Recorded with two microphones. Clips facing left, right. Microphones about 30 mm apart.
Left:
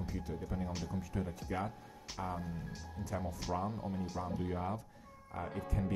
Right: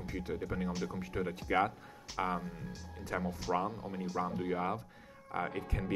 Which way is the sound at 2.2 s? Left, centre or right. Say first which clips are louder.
Right 5 dB; right.